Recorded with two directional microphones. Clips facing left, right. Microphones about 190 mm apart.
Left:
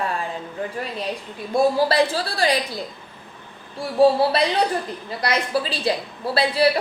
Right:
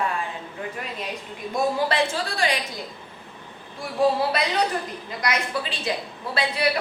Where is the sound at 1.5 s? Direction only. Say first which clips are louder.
Left 5 dB; 35° left (ahead or behind).